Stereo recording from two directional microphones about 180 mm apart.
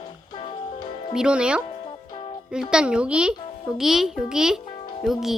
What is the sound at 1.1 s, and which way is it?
Speech, 5° right (ahead or behind).